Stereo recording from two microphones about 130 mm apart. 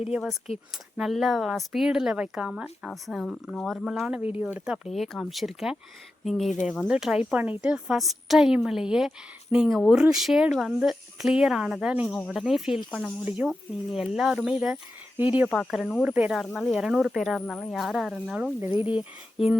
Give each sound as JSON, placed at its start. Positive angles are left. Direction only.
{"t": 0.1, "sound": "speech", "side_deg": 0}
{"t": 12.0, "sound": "speech", "side_deg": 10}
{"t": 13.2, "sound": "speech", "side_deg": -10}
{"t": 15.4, "sound": "speech", "side_deg": 0}
{"t": 16.0, "sound": "speech", "side_deg": -10}